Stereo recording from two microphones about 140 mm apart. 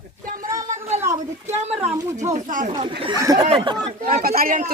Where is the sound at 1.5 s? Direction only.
50° right (ahead or behind).